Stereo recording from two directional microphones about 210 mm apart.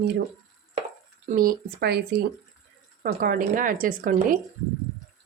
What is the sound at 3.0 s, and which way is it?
A woman's voice, 45° right (ahead or behind).